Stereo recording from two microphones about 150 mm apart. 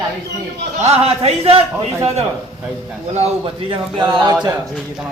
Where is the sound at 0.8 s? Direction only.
45° right (ahead or behind).